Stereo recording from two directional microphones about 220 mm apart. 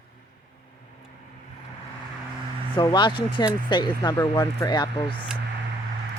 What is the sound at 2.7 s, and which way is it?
Speech, 20° left (ahead or behind).